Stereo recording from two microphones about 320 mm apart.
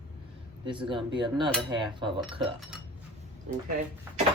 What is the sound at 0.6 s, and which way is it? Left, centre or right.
Speech, centre.